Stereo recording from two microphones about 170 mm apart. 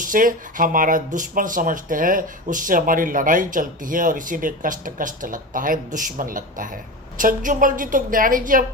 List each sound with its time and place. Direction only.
0.0 s speech: 50° right (ahead or behind)